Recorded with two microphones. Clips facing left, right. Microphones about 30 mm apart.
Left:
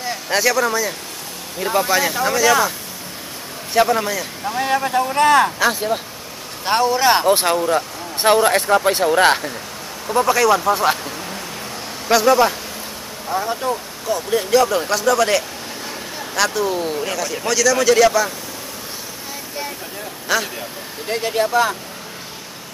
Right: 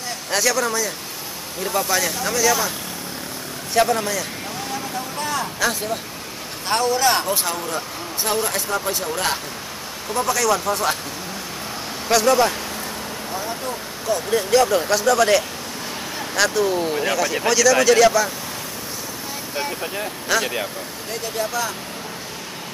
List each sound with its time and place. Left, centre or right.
0.0 s a man's voice: centre
3.7 s a man's voice: centre
4.6 s speech: left
5.6 s a man's voice: centre
7.2 s speech: left
7.5 s speech: left
8.2 s speech: left
10.0 s speech: left
12.1 s a man's voice: centre
13.3 s speech: left
14.0 s speech: centre
16.9 s speech: centre
20.3 s a man's voice: centre
21.1 s speech: left